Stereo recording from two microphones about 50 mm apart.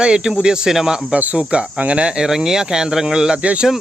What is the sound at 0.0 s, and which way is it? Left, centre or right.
Speech, centre.